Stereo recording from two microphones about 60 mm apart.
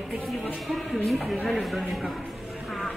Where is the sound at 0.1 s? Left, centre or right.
Centre.